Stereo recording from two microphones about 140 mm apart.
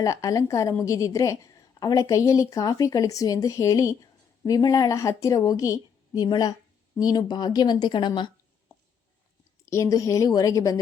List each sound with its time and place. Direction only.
0.0 s a woman's voice: 25° left (ahead or behind)
9.6 s a woman's voice: 20° left (ahead or behind)